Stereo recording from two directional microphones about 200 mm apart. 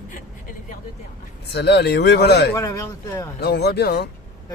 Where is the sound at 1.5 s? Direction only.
55° left (ahead or behind).